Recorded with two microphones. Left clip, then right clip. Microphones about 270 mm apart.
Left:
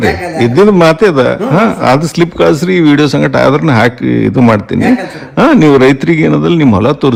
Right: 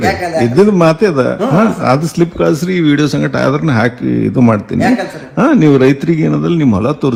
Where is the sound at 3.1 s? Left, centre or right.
Right.